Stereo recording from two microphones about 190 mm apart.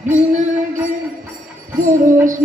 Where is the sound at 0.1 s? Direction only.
40° right (ahead or behind).